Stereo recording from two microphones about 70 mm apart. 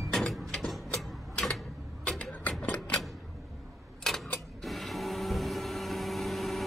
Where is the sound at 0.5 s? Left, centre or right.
Centre.